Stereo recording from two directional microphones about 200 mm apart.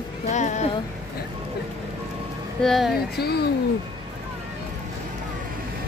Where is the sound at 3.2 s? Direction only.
50° left (ahead or behind).